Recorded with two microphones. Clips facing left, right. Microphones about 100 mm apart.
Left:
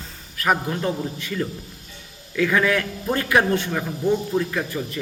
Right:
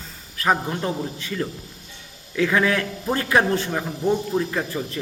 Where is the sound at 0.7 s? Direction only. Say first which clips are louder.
Left 1 dB; 30° right (ahead or behind).